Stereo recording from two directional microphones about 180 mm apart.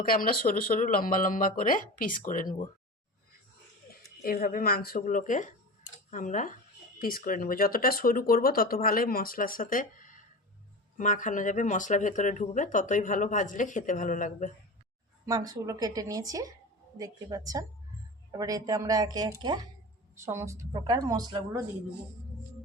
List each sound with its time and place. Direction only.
0.0 s speech: 55° left (ahead or behind)
4.2 s speech: 55° left (ahead or behind)
15.3 s a woman's voice: 20° right (ahead or behind)